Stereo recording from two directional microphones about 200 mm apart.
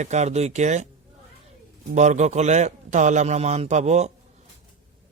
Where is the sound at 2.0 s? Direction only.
35° right (ahead or behind).